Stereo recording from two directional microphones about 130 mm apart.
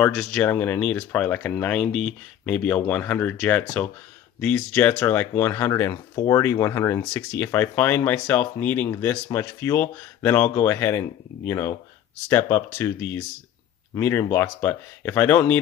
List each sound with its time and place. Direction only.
0.0 s speech: 5° left (ahead or behind); by 7.1 s 20° left (ahead or behind)
7.2 s speech: 10° left (ahead or behind)